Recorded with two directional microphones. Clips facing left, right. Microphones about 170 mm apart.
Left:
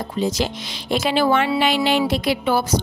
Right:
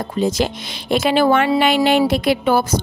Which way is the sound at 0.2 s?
55° right (ahead or behind).